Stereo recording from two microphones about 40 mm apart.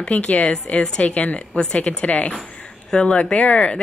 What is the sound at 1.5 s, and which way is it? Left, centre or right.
Speech, left.